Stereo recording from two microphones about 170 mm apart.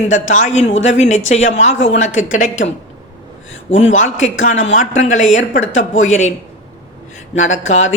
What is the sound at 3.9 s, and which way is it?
Speech, 45° left (ahead or behind).